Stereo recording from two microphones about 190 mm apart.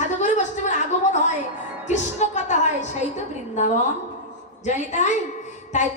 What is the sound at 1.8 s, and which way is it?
Speech, 40° left (ahead or behind).